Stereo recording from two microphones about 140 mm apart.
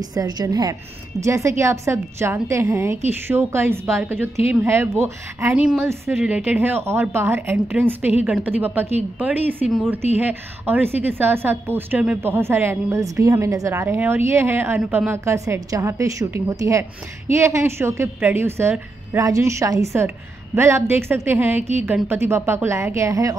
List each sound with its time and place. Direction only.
0.0 s a woman's voice: 30° right (ahead or behind)
5.6 s a woman's voice: 5° right (ahead or behind); by 23.3 s 25° right (ahead or behind)